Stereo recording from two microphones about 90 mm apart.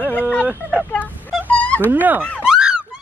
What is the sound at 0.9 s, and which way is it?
Speech, 15° left (ahead or behind).